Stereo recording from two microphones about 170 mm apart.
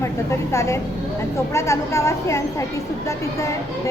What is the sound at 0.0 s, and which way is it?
A woman's voice, 15° left (ahead or behind).